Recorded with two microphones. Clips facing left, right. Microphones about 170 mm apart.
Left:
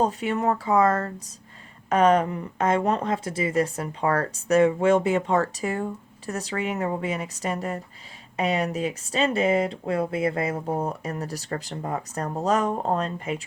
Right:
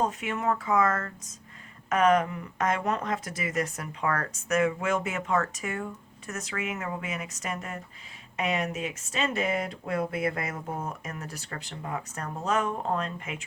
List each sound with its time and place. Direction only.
0.0 s speech: 35° left (ahead or behind)